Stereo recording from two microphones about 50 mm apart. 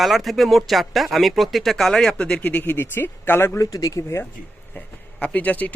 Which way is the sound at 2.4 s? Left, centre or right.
Left.